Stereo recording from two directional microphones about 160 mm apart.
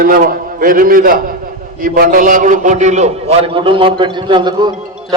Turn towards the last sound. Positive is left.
turn(degrees=-25)  # may be behind; listen again after turning